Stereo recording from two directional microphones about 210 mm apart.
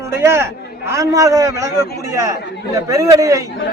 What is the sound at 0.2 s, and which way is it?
A man's voice, 10° right (ahead or behind).